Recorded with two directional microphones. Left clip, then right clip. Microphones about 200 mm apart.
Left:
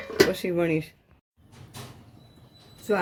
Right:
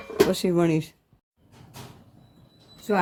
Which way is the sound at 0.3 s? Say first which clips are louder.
Right 2 dB; 60° right (ahead or behind).